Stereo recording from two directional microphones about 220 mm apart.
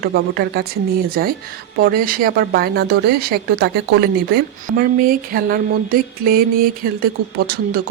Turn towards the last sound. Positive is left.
turn(degrees=-45)  # may be behind; listen again after turning